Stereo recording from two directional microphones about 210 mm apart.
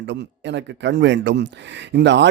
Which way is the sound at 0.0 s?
55° right (ahead or behind).